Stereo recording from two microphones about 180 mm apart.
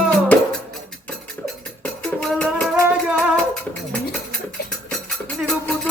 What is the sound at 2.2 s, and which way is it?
Music, 5° left (ahead or behind).